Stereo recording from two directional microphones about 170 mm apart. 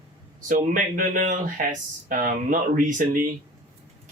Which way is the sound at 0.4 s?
55° right (ahead or behind).